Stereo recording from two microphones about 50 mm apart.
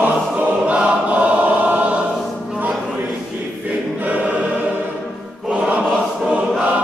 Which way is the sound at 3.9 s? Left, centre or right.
Right.